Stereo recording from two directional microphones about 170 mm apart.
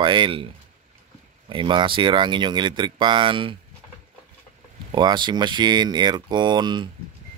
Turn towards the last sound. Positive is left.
turn(degrees=-25)  # may be behind; listen again after turning